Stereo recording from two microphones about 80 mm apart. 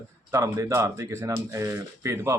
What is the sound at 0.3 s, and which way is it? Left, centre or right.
Speech, right.